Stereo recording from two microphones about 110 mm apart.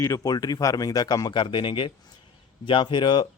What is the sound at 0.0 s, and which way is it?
Speech, 35° left (ahead or behind).